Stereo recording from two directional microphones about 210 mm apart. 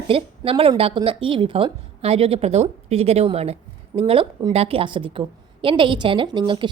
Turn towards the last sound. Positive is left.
turn(degrees=-25)  # may be behind; listen again after turning